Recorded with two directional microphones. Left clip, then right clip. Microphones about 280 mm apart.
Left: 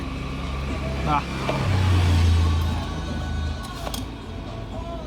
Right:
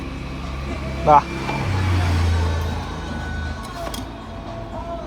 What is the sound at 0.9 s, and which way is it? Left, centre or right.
Vehicle, centre.